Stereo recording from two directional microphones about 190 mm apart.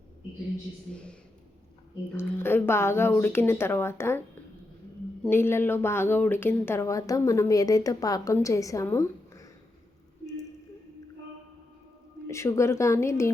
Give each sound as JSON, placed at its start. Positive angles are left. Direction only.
{"t": 2.1, "sound": "speech", "side_deg": 10}
{"t": 5.2, "sound": "speech", "side_deg": 10}
{"t": 12.3, "sound": "speech", "side_deg": 15}